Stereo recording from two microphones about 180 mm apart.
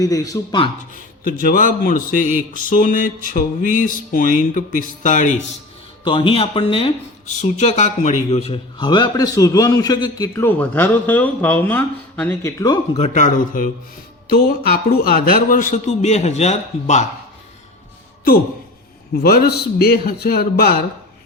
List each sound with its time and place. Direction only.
0.0 s speech: 20° left (ahead or behind)
0.9 s a man's voice: 50° left (ahead or behind)
6.1 s speech: 30° left (ahead or behind); by 13.7 s 45° left (ahead or behind)
14.3 s a man's voice: 55° left (ahead or behind); by 17.1 s 40° left (ahead or behind)
19.1 s a man's voice: 55° left (ahead or behind)